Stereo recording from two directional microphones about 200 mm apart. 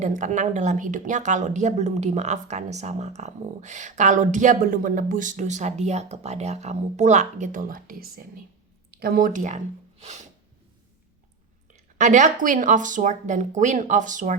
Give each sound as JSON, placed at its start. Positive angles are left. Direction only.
{"t": 0.0, "sound": "speech", "side_deg": -40}
{"t": 10.0, "sound": "snort", "side_deg": -35}
{"t": 11.9, "sound": "speech", "side_deg": -40}